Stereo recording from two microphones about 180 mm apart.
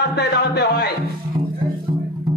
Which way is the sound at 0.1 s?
65° left (ahead or behind).